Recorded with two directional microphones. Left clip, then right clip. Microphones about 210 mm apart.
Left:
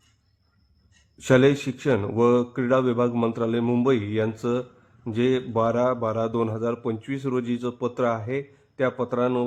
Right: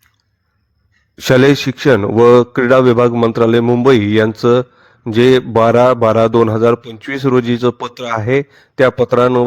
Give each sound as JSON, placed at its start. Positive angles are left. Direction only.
{"t": 1.2, "sound": "a man's voice", "side_deg": -40}